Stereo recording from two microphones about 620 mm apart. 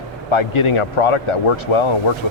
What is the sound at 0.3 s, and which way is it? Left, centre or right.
Speech, left.